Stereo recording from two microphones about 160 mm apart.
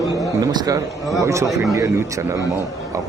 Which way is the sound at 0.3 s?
20° right (ahead or behind).